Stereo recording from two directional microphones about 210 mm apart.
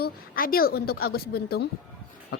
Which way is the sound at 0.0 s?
45° left (ahead or behind).